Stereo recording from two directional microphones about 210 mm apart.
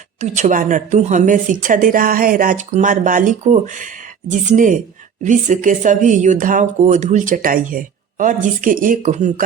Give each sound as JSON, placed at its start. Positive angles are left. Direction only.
{"t": 0.2, "sound": "speech", "side_deg": -35}